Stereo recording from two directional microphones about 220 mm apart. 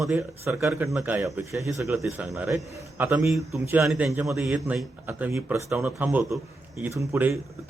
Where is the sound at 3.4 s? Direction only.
10° right (ahead or behind).